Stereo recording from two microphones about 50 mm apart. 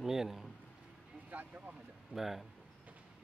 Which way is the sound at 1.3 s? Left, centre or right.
Right.